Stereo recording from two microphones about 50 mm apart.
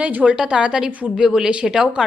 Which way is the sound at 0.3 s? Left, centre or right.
Centre.